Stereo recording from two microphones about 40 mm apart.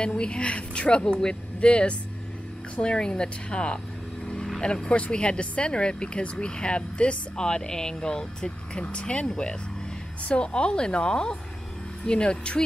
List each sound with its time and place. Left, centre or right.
0.0 s speech: left